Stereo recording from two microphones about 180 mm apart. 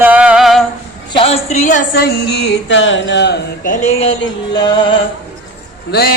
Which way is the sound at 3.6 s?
45° left (ahead or behind).